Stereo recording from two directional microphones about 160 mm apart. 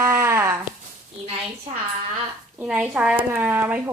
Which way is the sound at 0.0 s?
15° right (ahead or behind).